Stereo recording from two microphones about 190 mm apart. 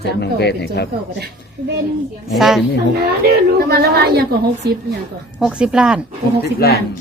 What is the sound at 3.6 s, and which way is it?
A woman's voice, 55° right (ahead or behind).